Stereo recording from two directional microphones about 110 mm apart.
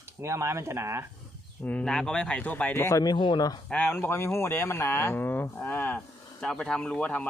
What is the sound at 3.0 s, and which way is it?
Speech, 45° left (ahead or behind).